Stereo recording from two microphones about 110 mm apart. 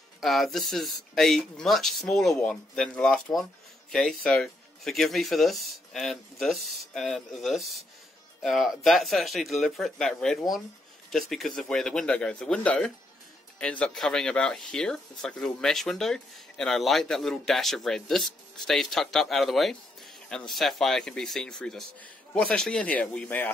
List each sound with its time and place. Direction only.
0.2 s speech: centre (ahead or behind)